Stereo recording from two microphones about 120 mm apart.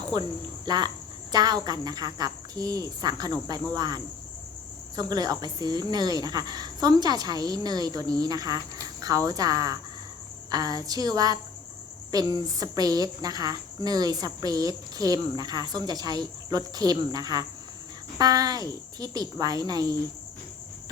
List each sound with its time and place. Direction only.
0.1 s a woman's voice: 35° right (ahead or behind)